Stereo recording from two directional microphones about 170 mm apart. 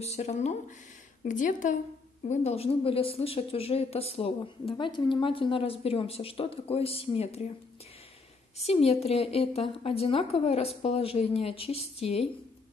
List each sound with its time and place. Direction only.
0.0 s a woman's voice: 40° left (ahead or behind)
8.6 s a woman's voice: 35° left (ahead or behind)